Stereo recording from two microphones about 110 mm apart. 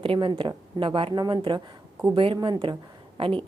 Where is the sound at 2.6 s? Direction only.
50° right (ahead or behind).